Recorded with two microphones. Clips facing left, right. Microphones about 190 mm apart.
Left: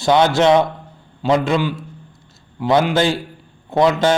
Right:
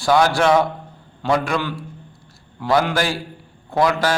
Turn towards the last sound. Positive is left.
turn(degrees=25)  # may be behind; listen again after turning